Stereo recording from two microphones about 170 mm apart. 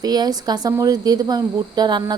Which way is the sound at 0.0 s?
25° right (ahead or behind).